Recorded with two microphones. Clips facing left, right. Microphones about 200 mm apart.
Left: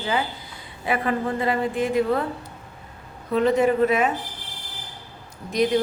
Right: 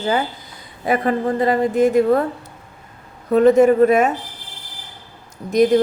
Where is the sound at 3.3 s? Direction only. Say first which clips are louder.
Right 7 dB; 45° right (ahead or behind).